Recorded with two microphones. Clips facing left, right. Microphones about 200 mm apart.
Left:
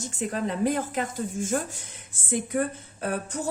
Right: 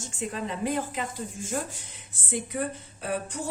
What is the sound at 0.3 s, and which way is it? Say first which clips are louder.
Speech: left 4 dB; 45° left (ahead or behind).